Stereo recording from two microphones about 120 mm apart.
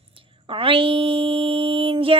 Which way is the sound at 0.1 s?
50° right (ahead or behind).